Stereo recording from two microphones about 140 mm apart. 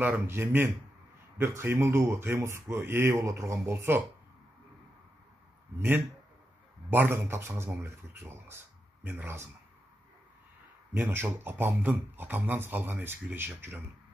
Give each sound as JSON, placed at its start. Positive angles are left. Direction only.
{"t": 0.0, "sound": "speech", "side_deg": -15}
{"t": 5.8, "sound": "speech", "side_deg": -15}
{"t": 10.9, "sound": "speech", "side_deg": -15}